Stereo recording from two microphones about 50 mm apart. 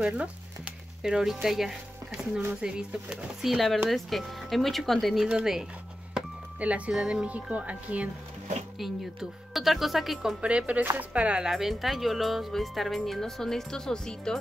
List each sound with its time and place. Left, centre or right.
0.0 s a sound: right
1.0 s speech: centre
2.5 s speech: centre
3.3 s speech: centre
6.1 s a sound: right
6.9 s speech: centre
8.7 s speech: centre
10.4 s speech: right
11.4 s speech: centre